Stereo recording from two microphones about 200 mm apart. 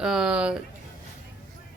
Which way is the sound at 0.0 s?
5° right (ahead or behind).